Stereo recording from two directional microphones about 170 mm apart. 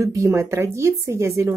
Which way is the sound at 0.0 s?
15° right (ahead or behind).